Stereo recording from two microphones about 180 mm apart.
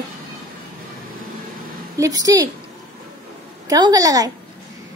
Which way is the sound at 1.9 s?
20° right (ahead or behind).